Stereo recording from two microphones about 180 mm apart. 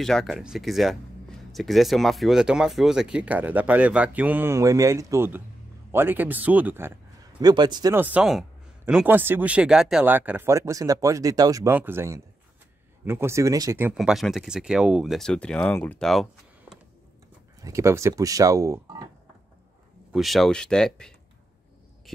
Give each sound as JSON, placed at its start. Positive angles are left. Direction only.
{"t": 0.0, "sound": "speech", "side_deg": 0}
{"t": 7.3, "sound": "a man's voice", "side_deg": -25}
{"t": 7.9, "sound": "speech", "side_deg": -10}
{"t": 13.9, "sound": "speech", "side_deg": 0}
{"t": 17.6, "sound": "speech", "side_deg": -15}
{"t": 20.1, "sound": "speech", "side_deg": 0}